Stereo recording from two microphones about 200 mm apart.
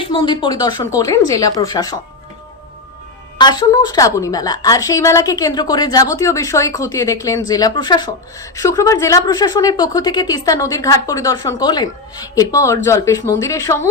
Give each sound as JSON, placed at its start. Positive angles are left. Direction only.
{"t": 0.0, "sound": "speech", "side_deg": 25}
{"t": 3.3, "sound": "a woman's voice", "side_deg": 20}